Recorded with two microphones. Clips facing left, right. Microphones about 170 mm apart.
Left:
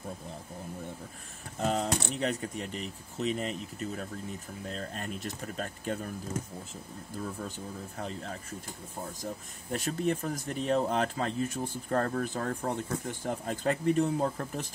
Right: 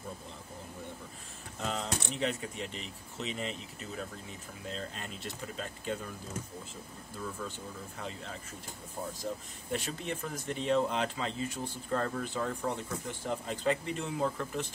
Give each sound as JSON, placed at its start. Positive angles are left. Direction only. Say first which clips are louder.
{"t": 1.6, "sound": "speech", "louder": "left 6 dB", "side_deg": 45}
{"t": 8.0, "sound": "speech", "louder": "left 4 dB", "side_deg": 45}